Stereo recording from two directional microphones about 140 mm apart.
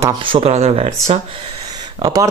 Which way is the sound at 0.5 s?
50° right (ahead or behind).